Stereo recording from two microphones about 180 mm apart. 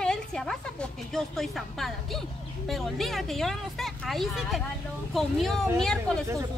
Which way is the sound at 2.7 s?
Centre (ahead or behind).